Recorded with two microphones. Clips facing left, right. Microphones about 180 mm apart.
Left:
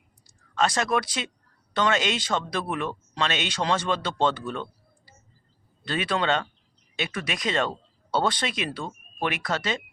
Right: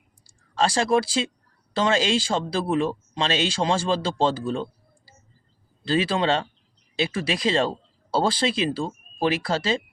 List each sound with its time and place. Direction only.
0.3 s speech: 30° right (ahead or behind)